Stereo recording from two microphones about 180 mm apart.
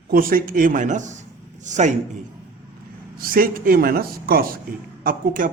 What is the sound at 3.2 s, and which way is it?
Speech, 55° right (ahead or behind).